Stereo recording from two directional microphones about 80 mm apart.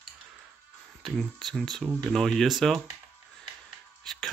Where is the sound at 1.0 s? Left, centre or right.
Centre.